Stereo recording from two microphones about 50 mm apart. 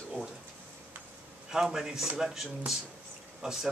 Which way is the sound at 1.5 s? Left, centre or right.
Centre.